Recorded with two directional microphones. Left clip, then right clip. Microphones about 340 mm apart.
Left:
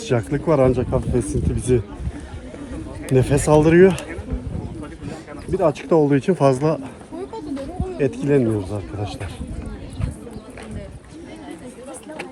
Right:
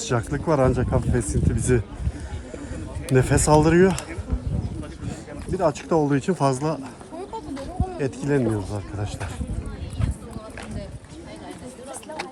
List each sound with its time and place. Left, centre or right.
0.0 s speech: centre
3.1 s speech: centre
5.5 s speech: centre
7.9 s speech: centre